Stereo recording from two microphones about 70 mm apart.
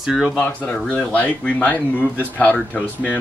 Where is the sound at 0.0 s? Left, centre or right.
Centre.